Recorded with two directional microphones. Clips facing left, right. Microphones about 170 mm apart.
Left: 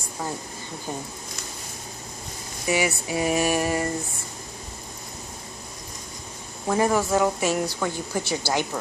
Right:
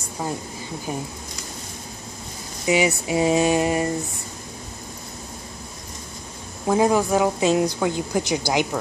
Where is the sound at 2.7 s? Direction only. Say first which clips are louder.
Right 4 dB; 20° right (ahead or behind).